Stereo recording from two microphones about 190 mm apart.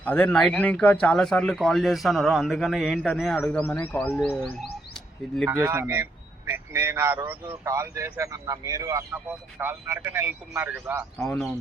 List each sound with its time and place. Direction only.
0.0 s speech: 10° left (ahead or behind)
4.6 s bird: 5° left (ahead or behind)
5.5 s a man's voice: 15° right (ahead or behind)
11.2 s speech: 5° left (ahead or behind)